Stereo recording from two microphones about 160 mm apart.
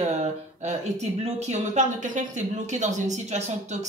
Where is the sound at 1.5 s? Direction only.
50° right (ahead or behind).